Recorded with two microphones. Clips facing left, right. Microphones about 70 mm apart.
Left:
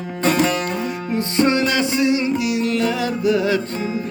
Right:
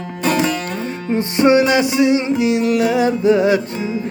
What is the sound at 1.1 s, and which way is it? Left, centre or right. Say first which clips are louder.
Music: right 5 dB; right.